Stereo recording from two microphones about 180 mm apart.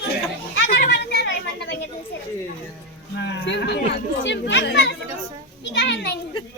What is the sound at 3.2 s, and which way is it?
Speech, 75° left (ahead or behind).